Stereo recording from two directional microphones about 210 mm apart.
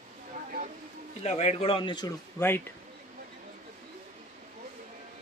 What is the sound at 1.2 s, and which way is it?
Speech, 30° left (ahead or behind).